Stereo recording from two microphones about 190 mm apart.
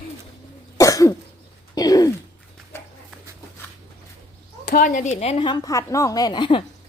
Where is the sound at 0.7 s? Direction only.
15° left (ahead or behind).